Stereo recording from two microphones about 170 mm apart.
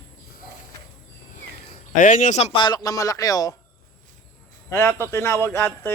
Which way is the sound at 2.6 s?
25° left (ahead or behind).